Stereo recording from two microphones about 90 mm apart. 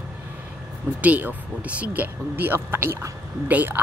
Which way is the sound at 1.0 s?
15° right (ahead or behind).